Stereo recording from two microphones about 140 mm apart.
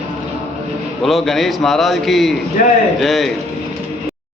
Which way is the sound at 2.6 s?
70° left (ahead or behind).